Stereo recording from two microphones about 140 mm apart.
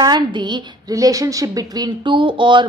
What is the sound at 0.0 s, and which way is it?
A woman's voice, 30° right (ahead or behind).